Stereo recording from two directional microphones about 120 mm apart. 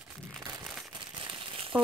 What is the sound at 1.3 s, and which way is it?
Crumpling, 40° right (ahead or behind).